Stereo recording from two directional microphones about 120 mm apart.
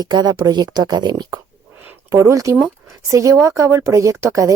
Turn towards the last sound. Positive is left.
turn(degrees=-25)  # may be behind; listen again after turning